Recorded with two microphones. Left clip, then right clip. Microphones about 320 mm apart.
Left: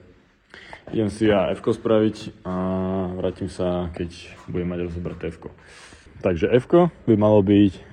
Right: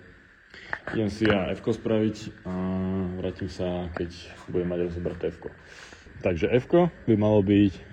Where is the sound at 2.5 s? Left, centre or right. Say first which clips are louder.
Left 7 dB; left.